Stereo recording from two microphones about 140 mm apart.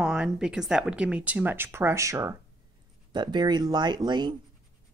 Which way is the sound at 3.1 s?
30° right (ahead or behind).